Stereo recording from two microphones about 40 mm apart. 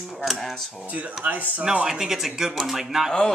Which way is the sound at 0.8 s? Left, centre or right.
Right.